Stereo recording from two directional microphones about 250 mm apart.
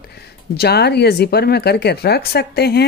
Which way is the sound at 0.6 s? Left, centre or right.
Left.